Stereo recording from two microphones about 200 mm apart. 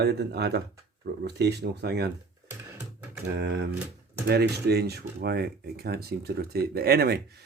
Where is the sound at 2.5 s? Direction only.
10° right (ahead or behind).